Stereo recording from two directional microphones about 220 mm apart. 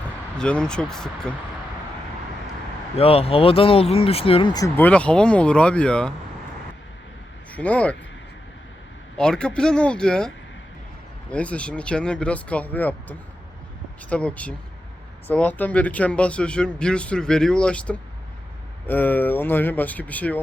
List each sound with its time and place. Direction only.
0.3 s speech: 5° left (ahead or behind)
2.9 s speech: 25° left (ahead or behind); by 6.1 s 5° left (ahead or behind)
7.5 s speech: 5° left (ahead or behind)
9.1 s speech: 5° left (ahead or behind)